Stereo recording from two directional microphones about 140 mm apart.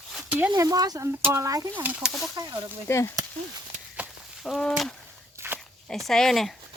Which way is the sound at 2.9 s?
20° left (ahead or behind).